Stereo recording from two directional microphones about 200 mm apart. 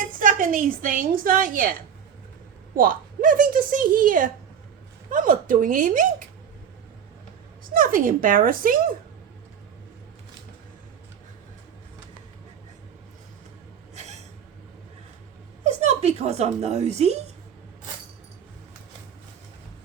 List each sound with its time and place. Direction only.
0.2 s a woman's voice: 45° right (ahead or behind)
2.7 s a woman's voice: 45° right (ahead or behind)
7.7 s a woman's voice: 45° right (ahead or behind)
13.9 s a sound: 35° right (ahead or behind)
15.6 s speech: 35° right (ahead or behind)